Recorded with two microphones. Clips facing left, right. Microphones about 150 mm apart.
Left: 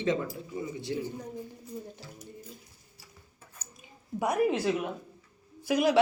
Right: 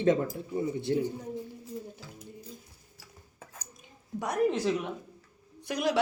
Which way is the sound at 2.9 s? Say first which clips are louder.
Right 5 dB; 90° right.